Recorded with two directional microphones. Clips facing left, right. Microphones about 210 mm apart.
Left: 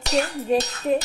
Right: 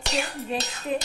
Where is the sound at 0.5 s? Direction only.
40° left (ahead or behind).